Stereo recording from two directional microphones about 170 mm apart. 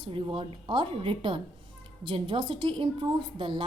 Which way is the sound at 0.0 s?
30° right (ahead or behind).